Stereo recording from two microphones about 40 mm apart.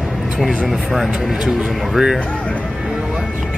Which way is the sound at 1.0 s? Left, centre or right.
Centre.